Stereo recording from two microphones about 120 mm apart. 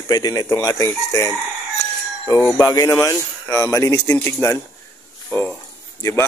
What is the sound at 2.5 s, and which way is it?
Speech, 25° left (ahead or behind).